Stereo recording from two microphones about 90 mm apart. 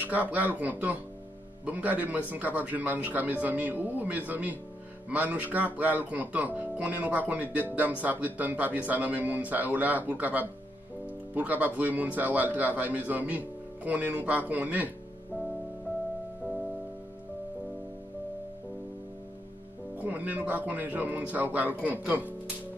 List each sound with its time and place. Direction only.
0.0 s a man's voice: 20° right (ahead or behind)
20.0 s a man's voice: 20° right (ahead or behind)